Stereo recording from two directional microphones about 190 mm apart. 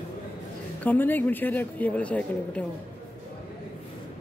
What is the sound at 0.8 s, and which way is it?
Speech, 10° left (ahead or behind).